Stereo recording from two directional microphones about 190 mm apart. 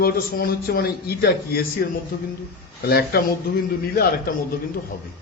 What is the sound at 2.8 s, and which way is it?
Speech, 55° left (ahead or behind).